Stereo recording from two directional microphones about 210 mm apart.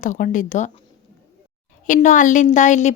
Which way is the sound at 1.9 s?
40° left (ahead or behind).